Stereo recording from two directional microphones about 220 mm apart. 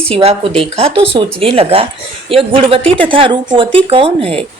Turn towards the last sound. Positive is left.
turn(degrees=-25)  # may be behind; listen again after turning